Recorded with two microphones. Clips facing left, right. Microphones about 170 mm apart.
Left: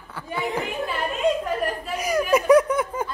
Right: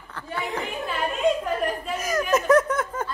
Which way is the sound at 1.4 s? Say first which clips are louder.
Even; 5° left (ahead or behind).